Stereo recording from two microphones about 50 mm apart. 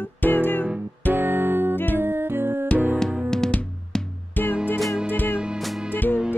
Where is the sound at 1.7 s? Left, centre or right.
Left.